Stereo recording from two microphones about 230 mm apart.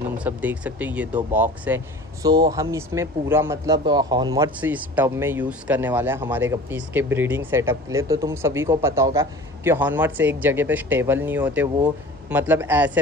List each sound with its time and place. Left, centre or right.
0.2 s speech: centre